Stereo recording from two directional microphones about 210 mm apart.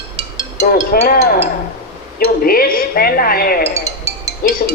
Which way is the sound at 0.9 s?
45° left (ahead or behind).